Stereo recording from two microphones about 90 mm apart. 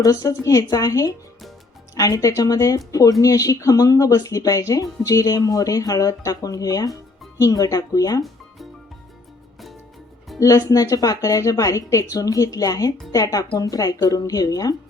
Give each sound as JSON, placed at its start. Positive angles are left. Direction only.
{"t": 0.0, "sound": "speech", "side_deg": 45}
{"t": 10.4, "sound": "speech", "side_deg": 40}